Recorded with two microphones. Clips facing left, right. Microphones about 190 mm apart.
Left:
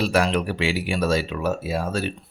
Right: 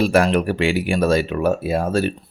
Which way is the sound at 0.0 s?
50° right (ahead or behind).